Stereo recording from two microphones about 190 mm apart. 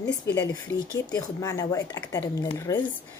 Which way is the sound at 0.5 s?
15° left (ahead or behind).